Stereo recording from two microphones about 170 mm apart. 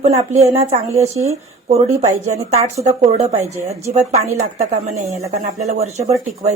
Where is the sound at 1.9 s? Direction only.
20° right (ahead or behind).